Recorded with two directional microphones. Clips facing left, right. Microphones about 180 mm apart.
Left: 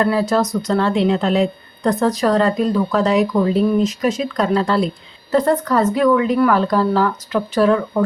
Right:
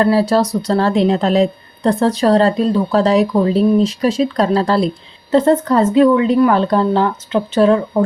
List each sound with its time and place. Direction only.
0.0 s a woman's voice: 30° right (ahead or behind)